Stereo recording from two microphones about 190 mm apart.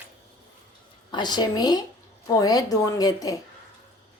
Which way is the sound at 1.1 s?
20° left (ahead or behind).